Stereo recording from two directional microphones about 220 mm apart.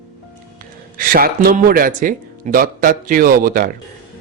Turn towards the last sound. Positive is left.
turn(degrees=-40)  # may be behind; listen again after turning